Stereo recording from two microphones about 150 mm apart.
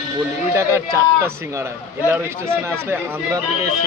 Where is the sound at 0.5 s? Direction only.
20° right (ahead or behind).